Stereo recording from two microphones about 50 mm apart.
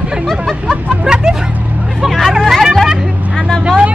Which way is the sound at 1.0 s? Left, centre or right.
Centre.